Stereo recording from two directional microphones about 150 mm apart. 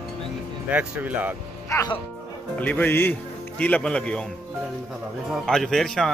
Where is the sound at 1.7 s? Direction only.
20° left (ahead or behind).